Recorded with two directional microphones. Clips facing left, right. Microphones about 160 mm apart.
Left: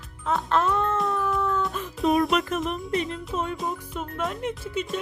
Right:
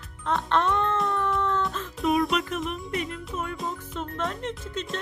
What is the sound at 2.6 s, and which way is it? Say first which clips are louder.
Music: left 4 dB; 30° left (ahead or behind).